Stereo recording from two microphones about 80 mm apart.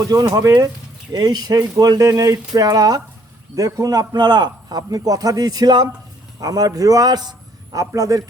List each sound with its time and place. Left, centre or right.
0.0 s a man's voice: right
4.8 s a man's voice: right